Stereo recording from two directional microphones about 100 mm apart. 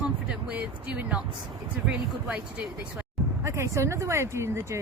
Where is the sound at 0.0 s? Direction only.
10° right (ahead or behind).